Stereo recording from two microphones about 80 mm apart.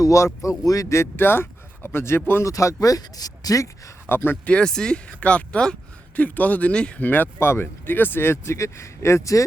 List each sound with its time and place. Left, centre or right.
0.0 s speech: left
2.5 s speech: left
4.1 s speech: left
4.4 s speech: centre
7.3 s speech: left